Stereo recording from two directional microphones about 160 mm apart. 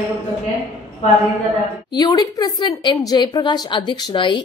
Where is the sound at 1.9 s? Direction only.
25° left (ahead or behind).